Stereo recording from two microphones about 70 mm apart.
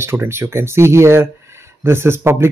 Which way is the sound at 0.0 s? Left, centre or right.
Right.